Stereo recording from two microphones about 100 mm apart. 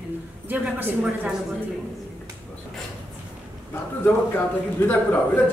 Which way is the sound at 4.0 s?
20° left (ahead or behind).